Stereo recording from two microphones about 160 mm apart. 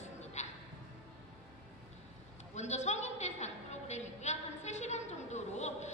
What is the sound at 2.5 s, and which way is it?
Speech, 45° left (ahead or behind).